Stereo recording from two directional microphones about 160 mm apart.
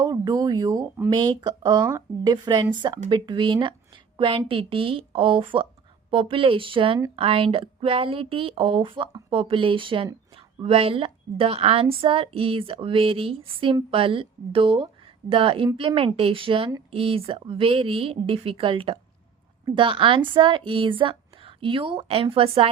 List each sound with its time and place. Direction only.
0.0 s a woman's voice: 25° right (ahead or behind)